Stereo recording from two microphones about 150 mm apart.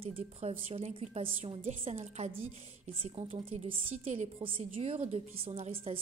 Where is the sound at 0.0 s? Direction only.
40° right (ahead or behind).